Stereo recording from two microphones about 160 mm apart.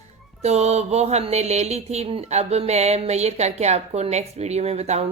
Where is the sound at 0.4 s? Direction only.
45° right (ahead or behind).